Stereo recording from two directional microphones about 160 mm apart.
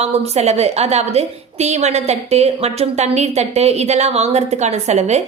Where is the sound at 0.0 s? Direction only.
40° right (ahead or behind).